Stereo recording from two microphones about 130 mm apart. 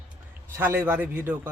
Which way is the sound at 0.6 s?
15° right (ahead or behind).